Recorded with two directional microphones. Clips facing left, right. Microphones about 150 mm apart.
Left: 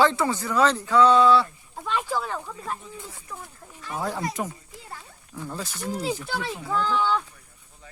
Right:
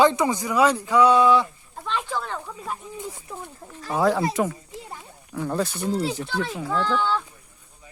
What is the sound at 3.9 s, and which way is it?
Speech, 90° right.